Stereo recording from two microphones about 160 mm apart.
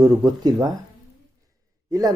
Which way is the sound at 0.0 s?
25° right (ahead or behind).